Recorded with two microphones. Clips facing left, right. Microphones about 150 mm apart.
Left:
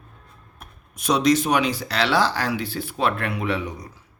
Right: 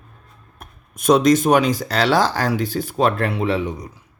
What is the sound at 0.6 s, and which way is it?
Speech, 50° right (ahead or behind).